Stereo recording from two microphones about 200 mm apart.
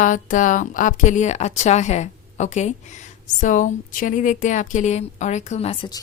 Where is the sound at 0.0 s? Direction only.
40° left (ahead or behind).